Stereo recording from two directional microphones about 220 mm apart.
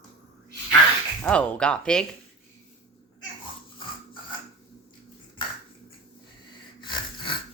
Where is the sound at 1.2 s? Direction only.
5° left (ahead or behind).